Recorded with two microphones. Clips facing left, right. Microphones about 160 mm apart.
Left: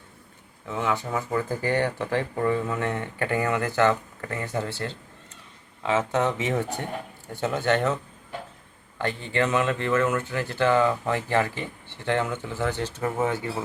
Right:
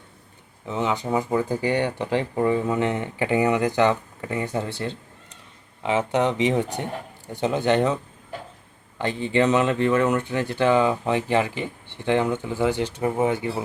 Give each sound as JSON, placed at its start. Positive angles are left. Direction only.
{"t": 0.6, "sound": "speech", "side_deg": -20}
{"t": 6.1, "sound": "speech", "side_deg": -15}
{"t": 9.0, "sound": "speech", "side_deg": -20}